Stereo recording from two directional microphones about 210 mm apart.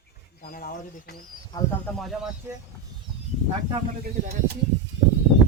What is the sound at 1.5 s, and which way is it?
Speech, 20° left (ahead or behind).